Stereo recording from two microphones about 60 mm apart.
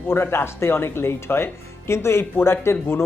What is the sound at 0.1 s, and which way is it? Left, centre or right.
Speech, left.